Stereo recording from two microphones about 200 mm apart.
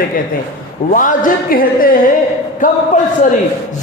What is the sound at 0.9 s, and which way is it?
A man's voice, 40° left (ahead or behind).